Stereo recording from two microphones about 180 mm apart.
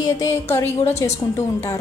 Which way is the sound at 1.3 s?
15° left (ahead or behind).